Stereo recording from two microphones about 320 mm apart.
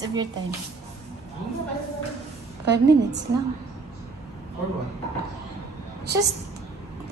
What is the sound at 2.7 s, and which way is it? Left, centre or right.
Speech, right.